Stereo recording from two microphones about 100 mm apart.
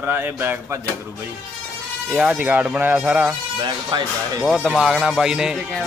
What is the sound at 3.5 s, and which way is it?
Speech, 55° right (ahead or behind).